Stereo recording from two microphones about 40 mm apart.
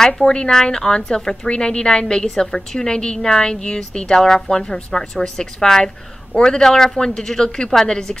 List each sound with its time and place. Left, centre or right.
0.0 s speech: centre
2.2 s a woman's voice: centre